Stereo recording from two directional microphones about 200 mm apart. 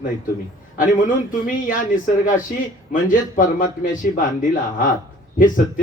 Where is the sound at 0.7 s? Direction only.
40° left (ahead or behind).